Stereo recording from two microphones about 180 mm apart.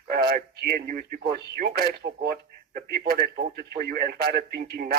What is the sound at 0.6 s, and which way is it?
Speech, 55° right (ahead or behind).